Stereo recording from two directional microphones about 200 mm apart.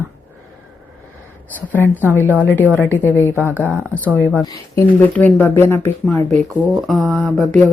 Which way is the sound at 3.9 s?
10° left (ahead or behind).